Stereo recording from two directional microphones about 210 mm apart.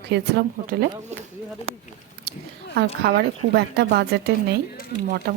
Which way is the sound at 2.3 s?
50° right (ahead or behind).